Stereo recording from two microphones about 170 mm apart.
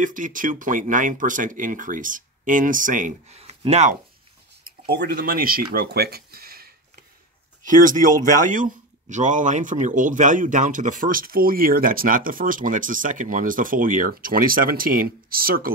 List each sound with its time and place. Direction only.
0.0 s speech: 50° right (ahead or behind)
4.6 s speech: 65° right (ahead or behind)
7.6 s speech: 50° right (ahead or behind)